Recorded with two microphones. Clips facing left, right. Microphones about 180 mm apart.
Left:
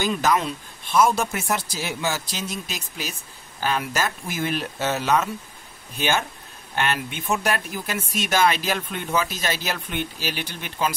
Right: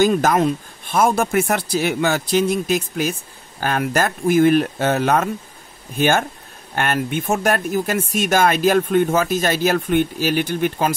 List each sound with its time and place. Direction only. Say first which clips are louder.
0.0 s speech: right 7 dB; 50° right (ahead or behind)